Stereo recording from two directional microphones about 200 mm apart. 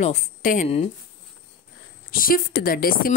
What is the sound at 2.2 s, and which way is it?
Speech, 45° left (ahead or behind).